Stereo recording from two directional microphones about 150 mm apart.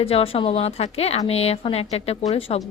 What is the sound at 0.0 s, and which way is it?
A woman's voice, 40° left (ahead or behind).